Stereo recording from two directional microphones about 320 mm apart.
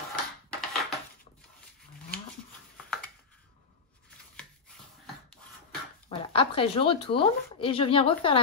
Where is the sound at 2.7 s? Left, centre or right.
Centre.